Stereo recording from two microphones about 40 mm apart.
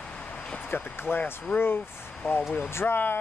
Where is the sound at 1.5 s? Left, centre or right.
Left.